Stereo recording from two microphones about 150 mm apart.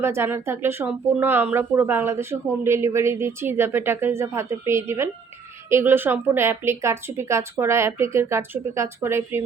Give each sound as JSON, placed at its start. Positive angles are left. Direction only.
{"t": 0.0, "sound": "speech", "side_deg": -15}